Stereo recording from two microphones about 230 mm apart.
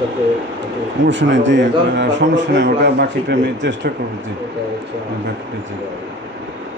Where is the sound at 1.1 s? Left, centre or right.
Right.